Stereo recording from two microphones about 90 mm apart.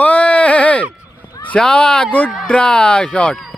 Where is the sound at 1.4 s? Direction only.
10° left (ahead or behind).